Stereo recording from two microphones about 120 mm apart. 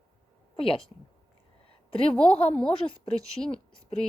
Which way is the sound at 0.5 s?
50° left (ahead or behind).